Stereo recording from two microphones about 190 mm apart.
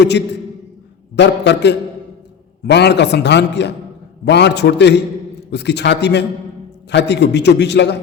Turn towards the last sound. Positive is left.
turn(degrees=65)  # may be behind; listen again after turning